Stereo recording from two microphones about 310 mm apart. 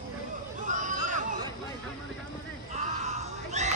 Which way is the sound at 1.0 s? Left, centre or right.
Right.